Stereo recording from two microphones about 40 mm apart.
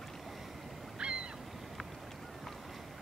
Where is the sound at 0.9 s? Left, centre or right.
Right.